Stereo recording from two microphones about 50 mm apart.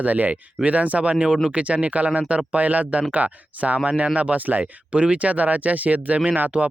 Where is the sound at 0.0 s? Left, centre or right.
Right.